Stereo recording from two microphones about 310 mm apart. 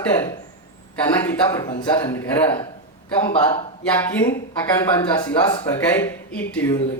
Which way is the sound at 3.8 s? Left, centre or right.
Centre.